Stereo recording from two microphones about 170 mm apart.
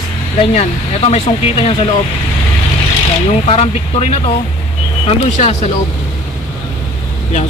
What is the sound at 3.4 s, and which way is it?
Speech, 35° left (ahead or behind).